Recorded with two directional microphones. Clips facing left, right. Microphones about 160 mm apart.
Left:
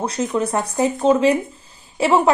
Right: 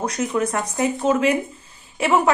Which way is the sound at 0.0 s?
30° left (ahead or behind).